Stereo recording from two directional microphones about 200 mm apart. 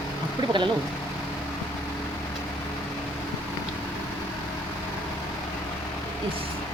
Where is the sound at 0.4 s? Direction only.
25° right (ahead or behind).